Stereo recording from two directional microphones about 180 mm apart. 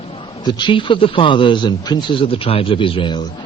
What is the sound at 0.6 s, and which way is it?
Speech, 25° left (ahead or behind).